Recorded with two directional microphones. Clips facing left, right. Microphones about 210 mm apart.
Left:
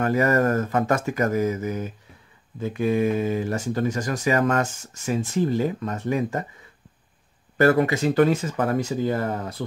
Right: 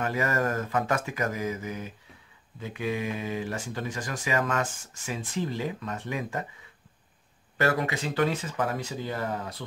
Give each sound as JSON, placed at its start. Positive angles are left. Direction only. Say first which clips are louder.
{"t": 0.0, "sound": "speech", "louder": "left 7 dB", "side_deg": 45}
{"t": 7.5, "sound": "speech", "louder": "left 8 dB", "side_deg": 45}